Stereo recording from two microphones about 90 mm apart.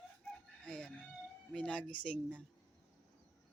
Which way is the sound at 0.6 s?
15° left (ahead or behind).